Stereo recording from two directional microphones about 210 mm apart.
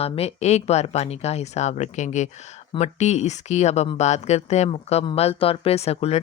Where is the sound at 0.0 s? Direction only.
30° left (ahead or behind).